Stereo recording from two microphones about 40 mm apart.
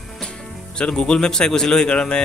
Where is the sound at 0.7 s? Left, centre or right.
Centre.